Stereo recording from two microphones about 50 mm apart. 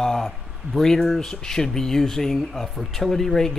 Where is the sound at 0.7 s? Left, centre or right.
Centre.